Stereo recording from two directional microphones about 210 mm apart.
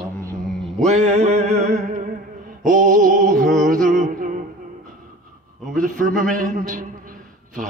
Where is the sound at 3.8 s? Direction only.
35° right (ahead or behind).